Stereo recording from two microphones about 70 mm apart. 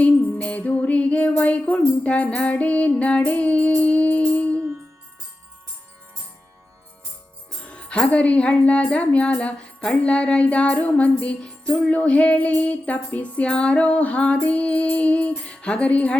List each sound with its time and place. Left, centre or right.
0.0 s music: centre
7.6 s speech: centre